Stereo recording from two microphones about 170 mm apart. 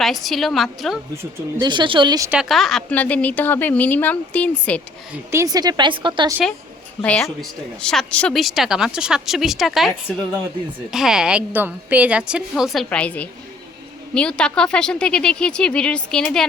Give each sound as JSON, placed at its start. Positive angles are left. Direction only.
{"t": 0.0, "sound": "speech", "side_deg": 0}
{"t": 1.1, "sound": "speech", "side_deg": -15}
{"t": 1.6, "sound": "a woman's voice", "side_deg": -30}
{"t": 2.3, "sound": "a woman's voice", "side_deg": 0}
{"t": 5.3, "sound": "a woman's voice", "side_deg": -20}
{"t": 7.0, "sound": "a woman's voice", "side_deg": 5}
{"t": 10.9, "sound": "speech", "side_deg": 0}